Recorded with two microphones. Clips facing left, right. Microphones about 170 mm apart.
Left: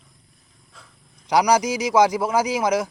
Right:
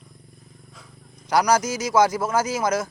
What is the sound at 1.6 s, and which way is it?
Speech, 75° left (ahead or behind).